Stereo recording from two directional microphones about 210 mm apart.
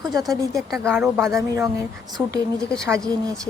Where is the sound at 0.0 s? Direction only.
20° right (ahead or behind).